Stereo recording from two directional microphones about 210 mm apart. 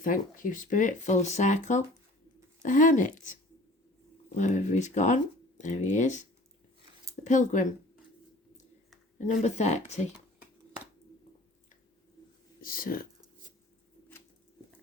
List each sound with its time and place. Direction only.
0.0 s speech: 40° left (ahead or behind)
4.4 s speech: 35° left (ahead or behind)
7.3 s speech: 35° left (ahead or behind)
9.2 s speech: 35° left (ahead or behind)
12.6 s speech: 45° left (ahead or behind)